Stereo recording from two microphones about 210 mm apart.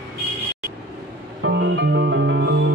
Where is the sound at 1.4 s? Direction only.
60° right (ahead or behind).